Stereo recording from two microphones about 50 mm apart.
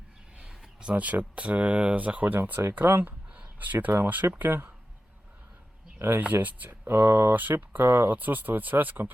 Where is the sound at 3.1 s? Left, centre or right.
Right.